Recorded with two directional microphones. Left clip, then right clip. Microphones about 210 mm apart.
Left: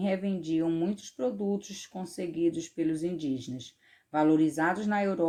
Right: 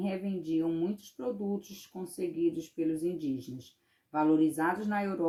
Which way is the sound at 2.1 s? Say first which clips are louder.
Left 2 dB; 40° left (ahead or behind).